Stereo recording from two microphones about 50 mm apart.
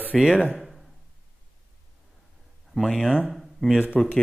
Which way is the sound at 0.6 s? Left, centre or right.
Centre.